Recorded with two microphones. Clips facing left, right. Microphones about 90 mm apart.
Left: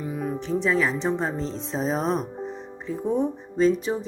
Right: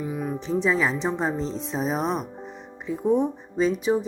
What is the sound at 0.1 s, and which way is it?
Speech, 15° right (ahead or behind).